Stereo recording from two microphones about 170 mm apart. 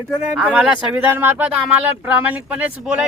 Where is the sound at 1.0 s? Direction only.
10° right (ahead or behind).